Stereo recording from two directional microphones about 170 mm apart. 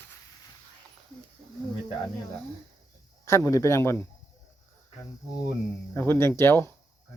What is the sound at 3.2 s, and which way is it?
Speech, 15° left (ahead or behind).